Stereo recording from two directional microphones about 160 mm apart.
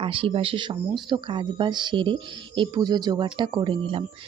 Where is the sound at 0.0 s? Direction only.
35° right (ahead or behind).